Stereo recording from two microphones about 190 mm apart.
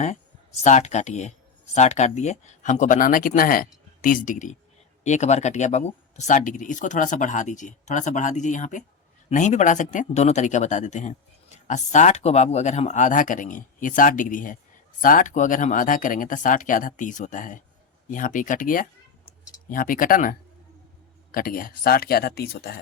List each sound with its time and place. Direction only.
0.0 s speech: 35° left (ahead or behind)
21.3 s speech: 50° left (ahead or behind)